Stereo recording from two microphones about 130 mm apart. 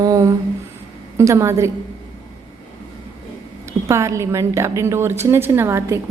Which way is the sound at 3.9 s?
25° right (ahead or behind).